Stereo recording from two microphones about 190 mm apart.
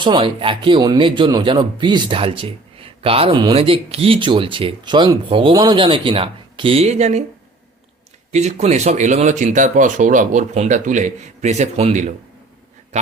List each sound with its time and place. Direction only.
0.0 s speech: 25° right (ahead or behind)
8.3 s speech: 35° right (ahead or behind)